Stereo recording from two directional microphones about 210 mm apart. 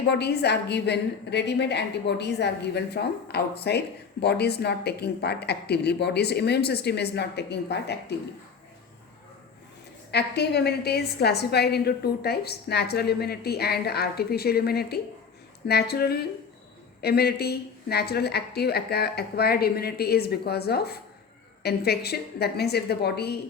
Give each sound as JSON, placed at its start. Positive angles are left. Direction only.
{"t": 0.1, "sound": "a woman's voice", "side_deg": 50}
{"t": 10.1, "sound": "a woman's voice", "side_deg": 50}